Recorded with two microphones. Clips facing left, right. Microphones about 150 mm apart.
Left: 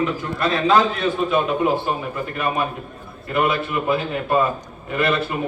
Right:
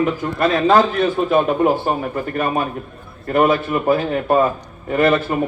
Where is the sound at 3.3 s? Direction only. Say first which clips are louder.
Right 5 dB; 45° right (ahead or behind).